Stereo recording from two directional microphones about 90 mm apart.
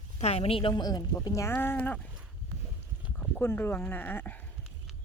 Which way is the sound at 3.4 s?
25° left (ahead or behind).